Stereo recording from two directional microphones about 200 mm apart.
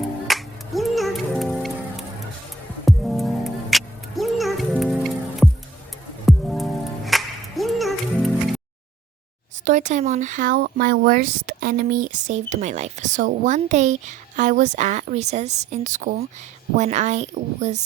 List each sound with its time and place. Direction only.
0.3 s music: centre (ahead or behind)
2.8 s music: centre (ahead or behind)
9.6 s speech: 40° right (ahead or behind)